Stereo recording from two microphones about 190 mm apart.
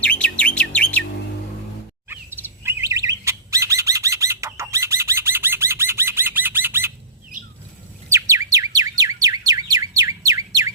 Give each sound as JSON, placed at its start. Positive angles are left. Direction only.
{"t": 0.0, "sound": "bird", "side_deg": 5}
{"t": 2.0, "sound": "chirp", "side_deg": -10}
{"t": 8.1, "sound": "bird", "side_deg": -15}